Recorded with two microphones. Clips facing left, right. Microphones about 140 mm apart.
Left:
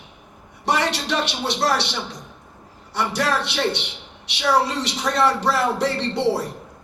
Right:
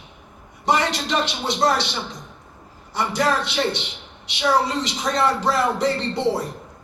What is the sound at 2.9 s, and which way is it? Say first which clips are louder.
A man's voice: right 1 dB; 75° left (ahead or behind).